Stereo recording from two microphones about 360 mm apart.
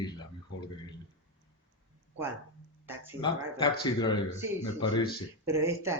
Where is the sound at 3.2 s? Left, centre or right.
Centre.